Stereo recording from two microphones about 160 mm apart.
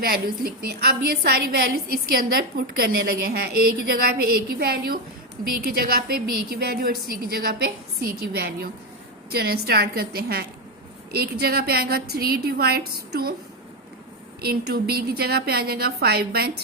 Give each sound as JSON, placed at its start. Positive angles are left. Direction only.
{"t": 0.0, "sound": "a woman's voice", "side_deg": -70}
{"t": 14.4, "sound": "a woman's voice", "side_deg": -75}